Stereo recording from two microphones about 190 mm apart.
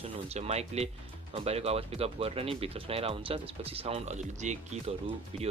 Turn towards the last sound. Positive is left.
turn(degrees=-35)  # may be behind; listen again after turning